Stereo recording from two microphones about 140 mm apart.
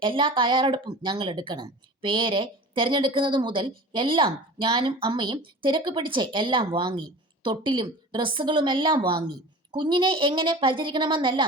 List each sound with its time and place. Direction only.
0.0 s a woman's voice: 35° right (ahead or behind)